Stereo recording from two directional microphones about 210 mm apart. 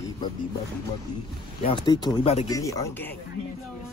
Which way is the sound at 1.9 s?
20° left (ahead or behind).